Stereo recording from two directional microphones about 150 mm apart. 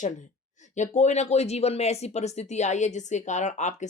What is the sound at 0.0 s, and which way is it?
Speech, 55° left (ahead or behind).